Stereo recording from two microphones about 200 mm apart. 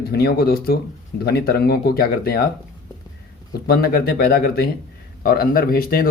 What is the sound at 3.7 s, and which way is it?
Speech, 50° left (ahead or behind).